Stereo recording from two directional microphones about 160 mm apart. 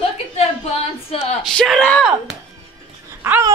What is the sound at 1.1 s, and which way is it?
Speech, 40° left (ahead or behind).